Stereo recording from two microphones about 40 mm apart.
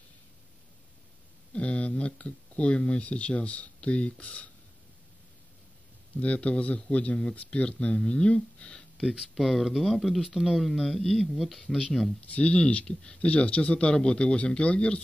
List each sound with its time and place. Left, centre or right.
1.5 s speech: left
6.1 s a man's voice: left
9.3 s speech: centre
12.2 s a man's voice: left